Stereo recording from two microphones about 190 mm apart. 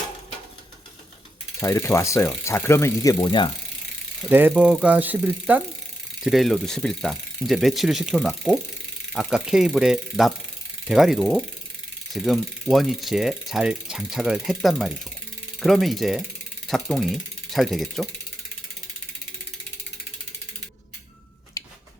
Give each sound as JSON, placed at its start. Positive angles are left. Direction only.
{"t": 1.6, "sound": "speech", "side_deg": 15}
{"t": 4.3, "sound": "speech", "side_deg": -10}
{"t": 6.2, "sound": "ratchet", "side_deg": 0}
{"t": 16.6, "sound": "speech", "side_deg": 0}
{"t": 21.6, "sound": "a sound", "side_deg": 15}